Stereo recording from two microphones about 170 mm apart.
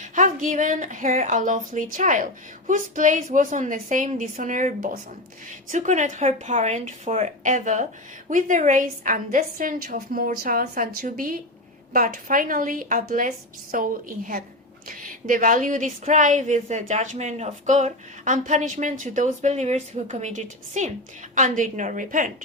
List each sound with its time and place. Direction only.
0.0 s a woman's voice: 50° right (ahead or behind)